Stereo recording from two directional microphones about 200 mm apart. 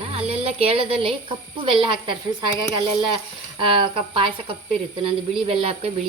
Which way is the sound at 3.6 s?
25° right (ahead or behind).